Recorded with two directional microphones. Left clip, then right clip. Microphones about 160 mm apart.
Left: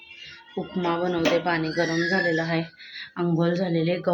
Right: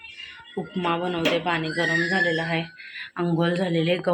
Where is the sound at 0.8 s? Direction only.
20° left (ahead or behind); by 4.1 s 5° left (ahead or behind).